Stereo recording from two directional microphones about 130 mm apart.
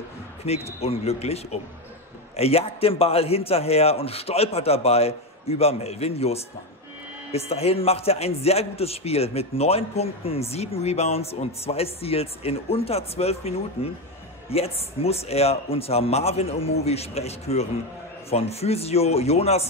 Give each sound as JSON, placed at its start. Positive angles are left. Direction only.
{"t": 0.4, "sound": "a man's voice", "side_deg": 50}